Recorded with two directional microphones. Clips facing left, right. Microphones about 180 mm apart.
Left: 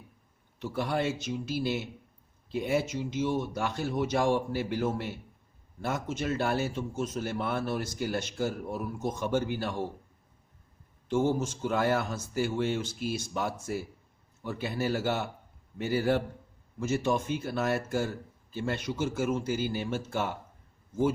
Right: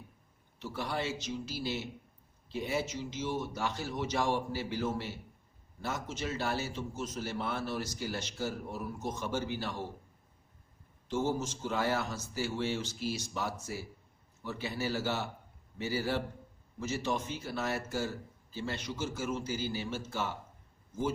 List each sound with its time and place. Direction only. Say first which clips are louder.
0.6 s a man's voice: left 6 dB; 55° left (ahead or behind)
11.1 s a man's voice: left 5 dB; 55° left (ahead or behind)